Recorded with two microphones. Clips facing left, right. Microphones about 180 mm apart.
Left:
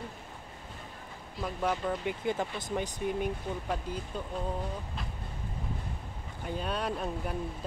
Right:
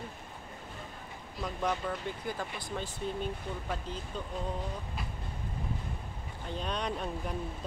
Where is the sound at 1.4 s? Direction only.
5° left (ahead or behind).